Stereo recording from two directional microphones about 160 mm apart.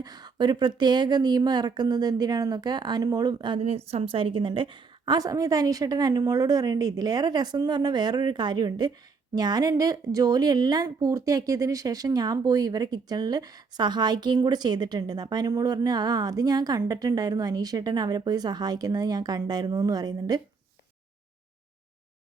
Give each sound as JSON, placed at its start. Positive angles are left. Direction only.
{"t": 0.0, "sound": "a woman's voice", "side_deg": -25}
{"t": 3.6, "sound": "a woman's voice", "side_deg": -40}